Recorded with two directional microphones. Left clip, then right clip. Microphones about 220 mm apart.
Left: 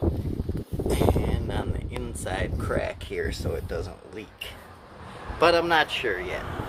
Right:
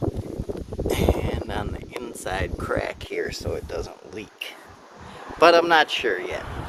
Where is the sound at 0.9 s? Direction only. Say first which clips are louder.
Right 1 dB; 40° right (ahead or behind).